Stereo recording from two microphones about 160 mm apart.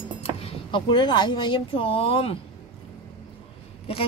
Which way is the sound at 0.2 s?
35° left (ahead or behind).